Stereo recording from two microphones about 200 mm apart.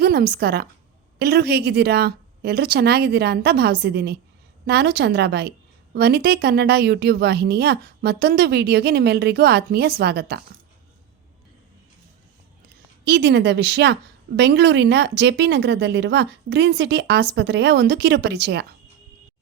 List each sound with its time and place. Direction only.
0.0 s a woman's voice: 50° right (ahead or behind)
13.1 s a woman's voice: 55° right (ahead or behind)